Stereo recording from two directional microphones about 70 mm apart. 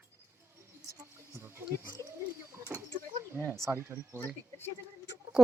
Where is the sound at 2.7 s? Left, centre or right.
Right.